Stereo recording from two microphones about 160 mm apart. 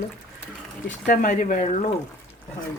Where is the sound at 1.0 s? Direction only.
60° left (ahead or behind).